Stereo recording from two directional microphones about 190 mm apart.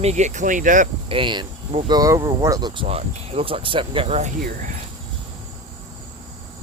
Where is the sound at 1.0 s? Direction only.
25° right (ahead or behind).